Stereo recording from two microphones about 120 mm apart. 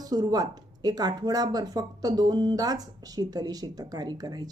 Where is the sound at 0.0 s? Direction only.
35° right (ahead or behind).